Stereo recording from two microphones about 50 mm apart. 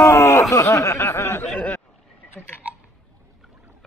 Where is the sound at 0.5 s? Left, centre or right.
Left.